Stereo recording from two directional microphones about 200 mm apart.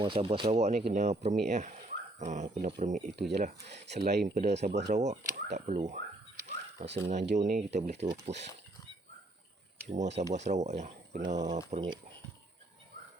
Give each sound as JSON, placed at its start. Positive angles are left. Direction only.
{"t": 0.0, "sound": "speech", "side_deg": -25}
{"t": 0.7, "sound": "speech", "side_deg": -50}
{"t": 0.9, "sound": "speech", "side_deg": -35}
{"t": 3.9, "sound": "speech", "side_deg": -50}
{"t": 4.4, "sound": "speech", "side_deg": -35}
{"t": 6.8, "sound": "speech", "side_deg": -60}
{"t": 7.3, "sound": "speech", "side_deg": -40}
{"t": 8.1, "sound": "speech", "side_deg": -60}
{"t": 9.9, "sound": "speech", "side_deg": -35}